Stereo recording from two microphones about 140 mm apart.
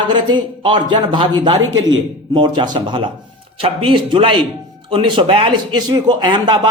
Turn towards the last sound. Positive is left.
turn(degrees=-30)  # may be behind; listen again after turning